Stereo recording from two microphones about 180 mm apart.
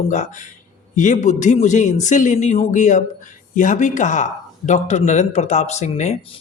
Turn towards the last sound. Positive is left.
turn(degrees=40)  # may be behind; listen again after turning